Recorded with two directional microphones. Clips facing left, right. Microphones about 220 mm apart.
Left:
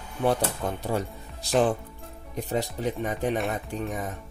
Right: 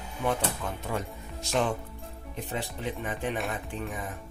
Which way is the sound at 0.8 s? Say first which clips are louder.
Left 5 dB; 35° left (ahead or behind).